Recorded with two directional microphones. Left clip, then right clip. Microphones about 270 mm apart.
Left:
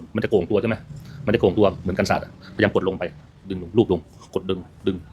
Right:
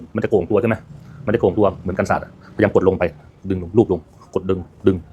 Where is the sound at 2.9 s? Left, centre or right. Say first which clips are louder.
Right 8 dB; centre.